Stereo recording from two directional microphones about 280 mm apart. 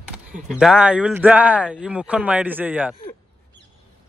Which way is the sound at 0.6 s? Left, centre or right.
Centre.